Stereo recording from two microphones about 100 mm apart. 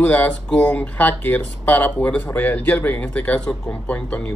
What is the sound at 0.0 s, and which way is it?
Speech, 15° left (ahead or behind).